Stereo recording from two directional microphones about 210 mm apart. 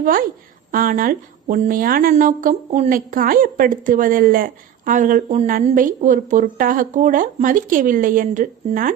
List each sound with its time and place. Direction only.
0.0 s a woman's voice: 40° right (ahead or behind)